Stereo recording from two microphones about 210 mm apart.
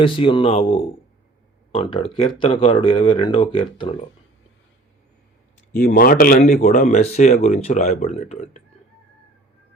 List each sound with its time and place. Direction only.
0.0 s speech: 25° left (ahead or behind)
5.8 s speech: 45° left (ahead or behind)